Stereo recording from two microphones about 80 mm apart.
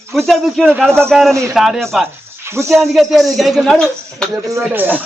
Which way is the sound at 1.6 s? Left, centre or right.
Centre.